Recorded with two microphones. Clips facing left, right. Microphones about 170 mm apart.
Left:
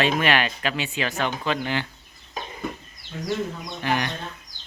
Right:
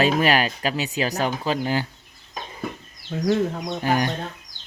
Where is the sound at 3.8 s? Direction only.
40° right (ahead or behind).